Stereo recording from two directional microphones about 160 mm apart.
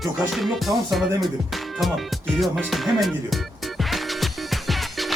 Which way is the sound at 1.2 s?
Centre (ahead or behind).